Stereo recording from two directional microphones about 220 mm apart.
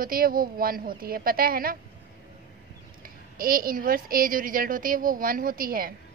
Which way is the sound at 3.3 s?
40° right (ahead or behind).